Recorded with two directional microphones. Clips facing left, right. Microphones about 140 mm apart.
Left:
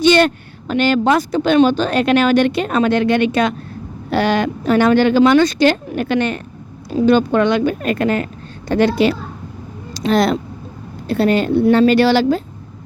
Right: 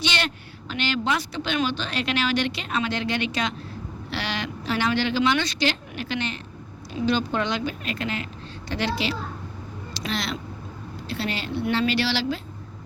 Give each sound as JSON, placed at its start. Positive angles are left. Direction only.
{"t": 0.0, "sound": "speech", "side_deg": 50}